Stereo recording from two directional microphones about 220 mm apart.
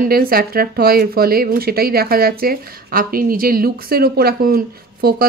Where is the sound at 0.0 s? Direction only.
45° right (ahead or behind).